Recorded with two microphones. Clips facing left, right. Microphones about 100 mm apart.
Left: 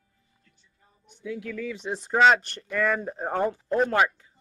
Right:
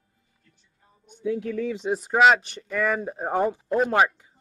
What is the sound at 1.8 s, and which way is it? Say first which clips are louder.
Speech: right 1 dB; 10° right (ahead or behind).